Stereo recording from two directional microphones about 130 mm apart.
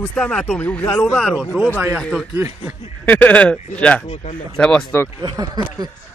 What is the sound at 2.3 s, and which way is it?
Speech, 25° right (ahead or behind).